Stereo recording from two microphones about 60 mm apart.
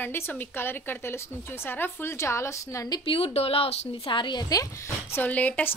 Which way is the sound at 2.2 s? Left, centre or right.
Left.